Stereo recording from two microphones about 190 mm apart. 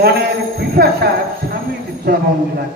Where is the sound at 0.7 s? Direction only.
55° right (ahead or behind).